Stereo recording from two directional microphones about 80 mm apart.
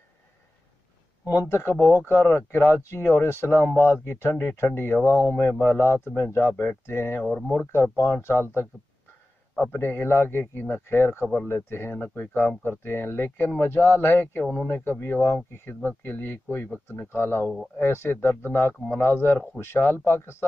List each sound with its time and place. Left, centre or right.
1.5 s speech: left
1.8 s speech: centre
2.0 s speech: left
3.6 s speech: centre
3.9 s speech: left
6.5 s speech: centre
6.9 s speech: left
7.2 s speech: centre
7.7 s speech: left